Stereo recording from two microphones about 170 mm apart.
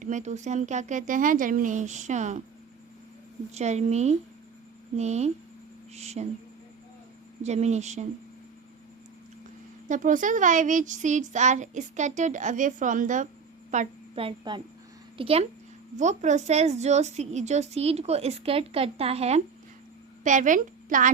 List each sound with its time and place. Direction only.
0.0 s speech: 45° right (ahead or behind)
3.5 s a woman's voice: 40° right (ahead or behind)
7.4 s a woman's voice: 40° right (ahead or behind)
9.9 s speech: 50° right (ahead or behind)
13.7 s a sound: 45° right (ahead or behind)
14.3 s a woman's voice: 25° right (ahead or behind)
20.2 s a woman's voice: 50° right (ahead or behind)